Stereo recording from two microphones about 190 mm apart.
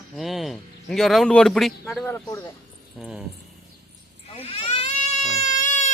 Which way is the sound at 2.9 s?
Centre (ahead or behind).